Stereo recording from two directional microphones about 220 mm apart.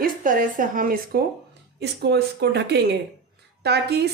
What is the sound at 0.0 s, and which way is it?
A woman's voice, 40° right (ahead or behind).